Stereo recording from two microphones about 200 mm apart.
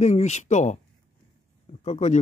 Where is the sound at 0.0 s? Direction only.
35° left (ahead or behind).